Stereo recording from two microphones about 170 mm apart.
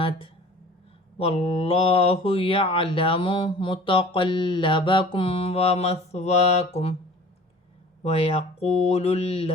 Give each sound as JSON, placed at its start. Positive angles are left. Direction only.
{"t": 1.2, "sound": "speech", "side_deg": 35}
{"t": 8.0, "sound": "speech", "side_deg": 35}